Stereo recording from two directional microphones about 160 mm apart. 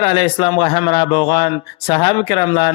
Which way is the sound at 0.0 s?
30° left (ahead or behind).